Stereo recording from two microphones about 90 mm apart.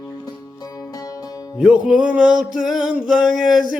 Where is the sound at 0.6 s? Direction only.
45° left (ahead or behind).